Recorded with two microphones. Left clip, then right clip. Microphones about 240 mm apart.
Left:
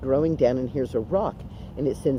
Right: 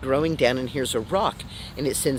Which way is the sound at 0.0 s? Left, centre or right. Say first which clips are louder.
Even; right.